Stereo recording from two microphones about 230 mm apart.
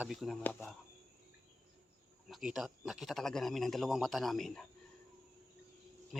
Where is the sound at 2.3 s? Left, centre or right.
Centre.